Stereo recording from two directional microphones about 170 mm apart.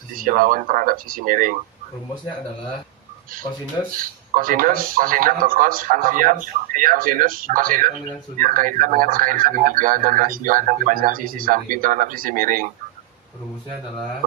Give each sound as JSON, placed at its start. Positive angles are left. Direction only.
{"t": 0.2, "sound": "a man's voice", "side_deg": -55}
{"t": 4.4, "sound": "a man's voice", "side_deg": -55}